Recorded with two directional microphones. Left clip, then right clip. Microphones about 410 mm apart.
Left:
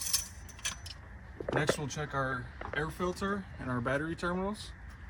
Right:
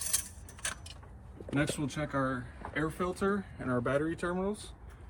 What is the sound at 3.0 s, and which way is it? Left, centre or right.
Speech, centre.